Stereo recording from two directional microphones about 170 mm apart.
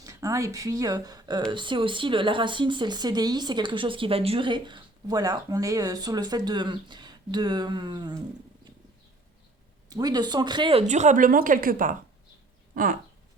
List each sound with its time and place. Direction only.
0.0 s speech: 20° right (ahead or behind)
9.9 s a woman's voice: 20° right (ahead or behind); by 13.0 s 55° right (ahead or behind)